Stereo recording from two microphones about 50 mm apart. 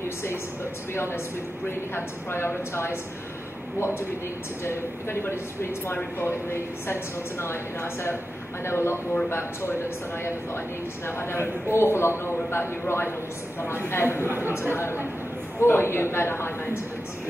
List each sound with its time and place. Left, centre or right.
0.9 s a woman's voice: left
4.6 s a woman's voice: left
14.2 s speech: right
14.5 s a woman's voice: left